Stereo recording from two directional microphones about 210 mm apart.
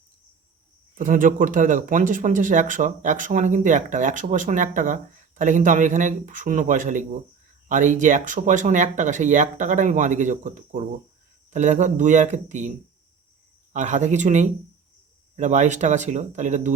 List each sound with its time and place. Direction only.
0.9 s speech: 40° right (ahead or behind)
13.7 s speech: 35° right (ahead or behind)